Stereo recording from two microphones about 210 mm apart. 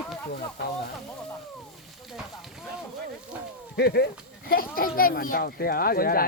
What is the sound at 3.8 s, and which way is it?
Speech, 50° left (ahead or behind).